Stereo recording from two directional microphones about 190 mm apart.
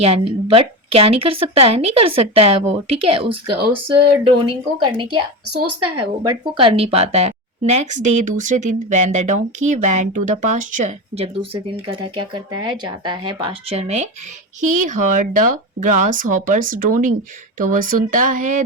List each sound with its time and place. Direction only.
0.0 s speech: 30° right (ahead or behind)
6.2 s speech: 25° right (ahead or behind); by 18.6 s 45° right (ahead or behind)